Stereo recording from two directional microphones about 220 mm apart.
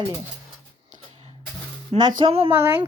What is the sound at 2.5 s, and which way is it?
Speech, 10° right (ahead or behind).